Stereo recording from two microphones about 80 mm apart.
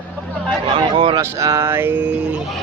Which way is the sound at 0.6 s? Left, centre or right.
Right.